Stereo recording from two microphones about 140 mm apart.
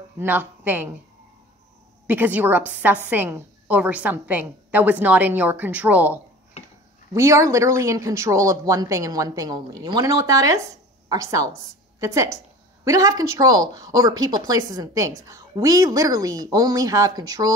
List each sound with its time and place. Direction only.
0.2 s a woman's voice: 15° right (ahead or behind)
2.0 s a woman's voice: 10° right (ahead or behind)
7.2 s speech: 20° right (ahead or behind)